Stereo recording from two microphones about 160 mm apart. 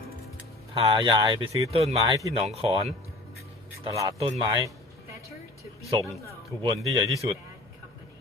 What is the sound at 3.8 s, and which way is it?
Speech, 20° right (ahead or behind).